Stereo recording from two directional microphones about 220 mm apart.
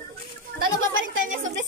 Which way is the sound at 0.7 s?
65° right (ahead or behind).